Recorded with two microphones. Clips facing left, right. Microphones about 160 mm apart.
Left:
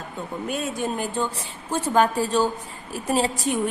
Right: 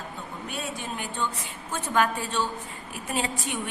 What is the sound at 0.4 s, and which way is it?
A woman's voice, 45° left (ahead or behind).